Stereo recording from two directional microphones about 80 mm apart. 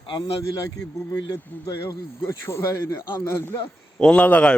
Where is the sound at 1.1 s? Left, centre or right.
Left.